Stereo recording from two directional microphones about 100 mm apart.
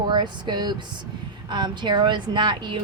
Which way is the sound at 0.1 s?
50° right (ahead or behind).